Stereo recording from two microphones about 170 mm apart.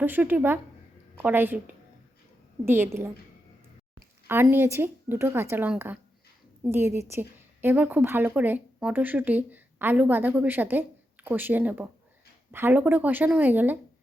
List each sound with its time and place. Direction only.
0.0 s a woman's voice: 10° right (ahead or behind)
4.5 s a woman's voice: 15° right (ahead or behind)